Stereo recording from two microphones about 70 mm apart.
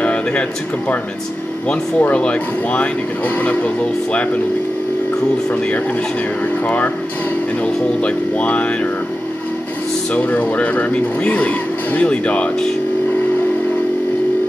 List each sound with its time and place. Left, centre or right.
0.0 s speech: centre
7.6 s speech: centre
10.1 s speech: left